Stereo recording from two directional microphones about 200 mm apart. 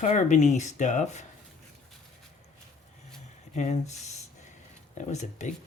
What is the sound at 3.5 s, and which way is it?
Speech, 35° left (ahead or behind).